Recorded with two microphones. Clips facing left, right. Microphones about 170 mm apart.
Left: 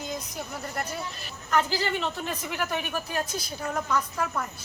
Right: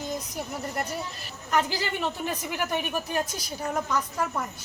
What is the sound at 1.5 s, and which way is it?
A woman's voice, 15° right (ahead or behind).